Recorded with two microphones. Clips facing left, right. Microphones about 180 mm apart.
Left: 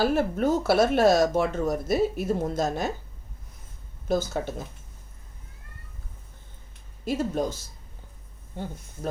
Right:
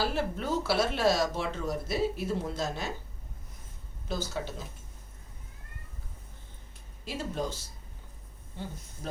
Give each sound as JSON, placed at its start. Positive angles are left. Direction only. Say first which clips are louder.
{"t": 0.0, "sound": "speech", "louder": "left 8 dB", "side_deg": 50}
{"t": 4.1, "sound": "speech", "louder": "left 8 dB", "side_deg": 50}
{"t": 7.0, "sound": "speech", "louder": "left 8 dB", "side_deg": 45}